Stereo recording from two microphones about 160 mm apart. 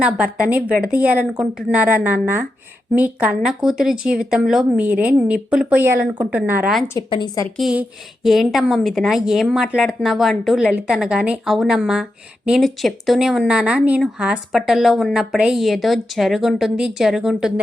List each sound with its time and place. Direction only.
0.0 s speech: 10° right (ahead or behind)
7.1 s a woman's voice: 30° left (ahead or behind)
7.5 s speech: 5° right (ahead or behind)